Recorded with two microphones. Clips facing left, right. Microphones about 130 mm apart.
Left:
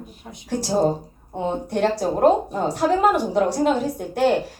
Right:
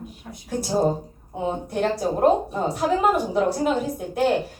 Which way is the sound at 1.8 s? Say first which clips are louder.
Left 2 dB; 70° left (ahead or behind).